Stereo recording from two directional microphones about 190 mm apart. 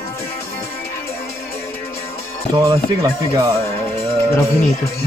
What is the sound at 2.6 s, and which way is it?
Speech, 20° right (ahead or behind).